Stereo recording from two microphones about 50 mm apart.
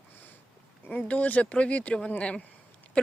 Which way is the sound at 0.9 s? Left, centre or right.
Left.